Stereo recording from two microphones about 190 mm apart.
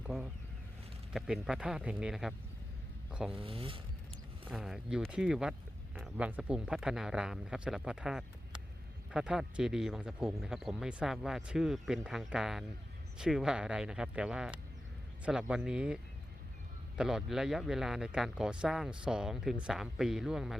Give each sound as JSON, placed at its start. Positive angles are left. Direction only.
{"t": 0.0, "sound": "speech", "side_deg": -5}
{"t": 3.4, "sound": "speech", "side_deg": -30}
{"t": 4.4, "sound": "speech", "side_deg": -5}
{"t": 17.0, "sound": "speech", "side_deg": -5}